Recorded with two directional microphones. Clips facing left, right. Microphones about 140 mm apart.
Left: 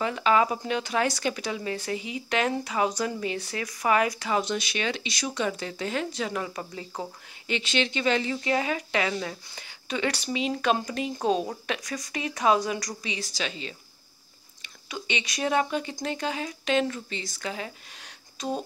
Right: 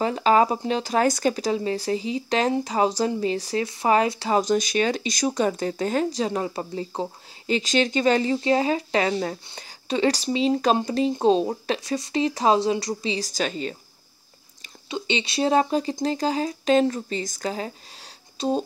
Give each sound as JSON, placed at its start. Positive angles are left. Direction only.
{"t": 0.0, "sound": "speech", "side_deg": -35}
{"t": 13.3, "sound": "a woman's voice", "side_deg": -45}
{"t": 14.9, "sound": "speech", "side_deg": -30}
{"t": 18.4, "sound": "music", "side_deg": -30}